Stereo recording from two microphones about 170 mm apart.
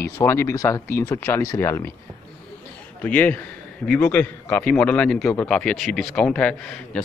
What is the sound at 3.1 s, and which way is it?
A man's voice, 10° left (ahead or behind).